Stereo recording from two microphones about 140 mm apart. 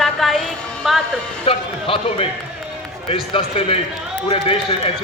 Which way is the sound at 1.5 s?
40° left (ahead or behind).